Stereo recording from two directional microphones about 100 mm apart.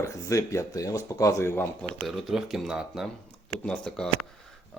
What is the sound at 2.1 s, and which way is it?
Speech, centre (ahead or behind).